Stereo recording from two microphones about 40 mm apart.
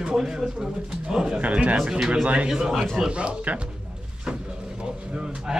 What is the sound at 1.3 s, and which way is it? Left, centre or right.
Speech, right.